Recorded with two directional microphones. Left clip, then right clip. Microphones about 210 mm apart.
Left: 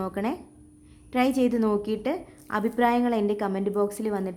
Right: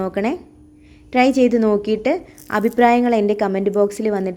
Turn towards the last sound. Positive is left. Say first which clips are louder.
# right 9 dB
turn(degrees=-15)  # may be behind; listen again after turning